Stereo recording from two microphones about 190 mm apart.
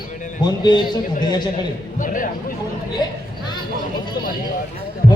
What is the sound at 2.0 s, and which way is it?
Speech, 45° left (ahead or behind).